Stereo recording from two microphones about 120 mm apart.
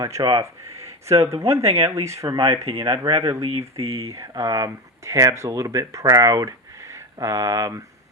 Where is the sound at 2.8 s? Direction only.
35° right (ahead or behind).